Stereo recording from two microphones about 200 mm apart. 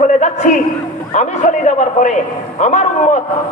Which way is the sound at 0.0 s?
40° left (ahead or behind).